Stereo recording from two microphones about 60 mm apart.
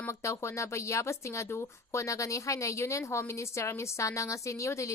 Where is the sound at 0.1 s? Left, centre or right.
Left.